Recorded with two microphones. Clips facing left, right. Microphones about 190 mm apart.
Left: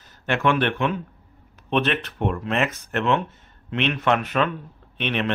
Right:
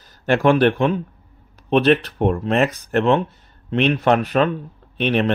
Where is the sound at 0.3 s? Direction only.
35° right (ahead or behind).